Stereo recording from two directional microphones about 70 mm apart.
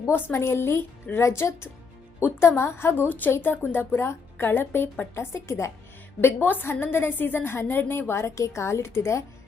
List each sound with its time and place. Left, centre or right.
0.1 s a woman's voice: left
3.1 s a woman's voice: left
6.2 s a woman's voice: left